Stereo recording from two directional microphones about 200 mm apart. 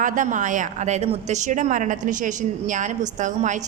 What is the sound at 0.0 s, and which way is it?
A woman's voice, 40° right (ahead or behind).